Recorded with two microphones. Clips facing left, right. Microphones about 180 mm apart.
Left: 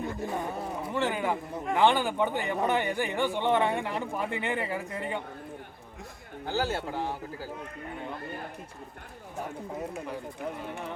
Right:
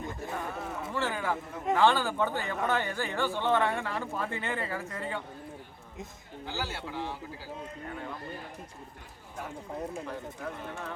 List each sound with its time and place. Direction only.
0.2 s a sound: 15° left (ahead or behind)
1.7 s speech: 15° left (ahead or behind)
6.4 s speech: 50° left (ahead or behind)
10.1 s speech: 15° left (ahead or behind)